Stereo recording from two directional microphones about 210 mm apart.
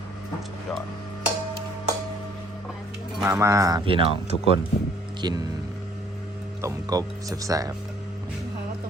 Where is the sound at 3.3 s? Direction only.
15° right (ahead or behind).